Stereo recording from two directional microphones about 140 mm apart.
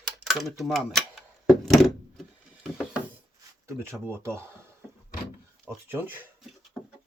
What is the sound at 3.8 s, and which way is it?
Speech, 15° right (ahead or behind).